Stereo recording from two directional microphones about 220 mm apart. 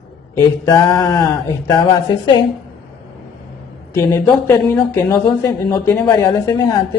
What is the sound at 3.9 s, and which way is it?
Speech, 15° left (ahead or behind).